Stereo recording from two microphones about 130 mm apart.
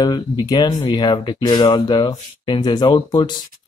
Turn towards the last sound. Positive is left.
turn(degrees=35)  # may be behind; listen again after turning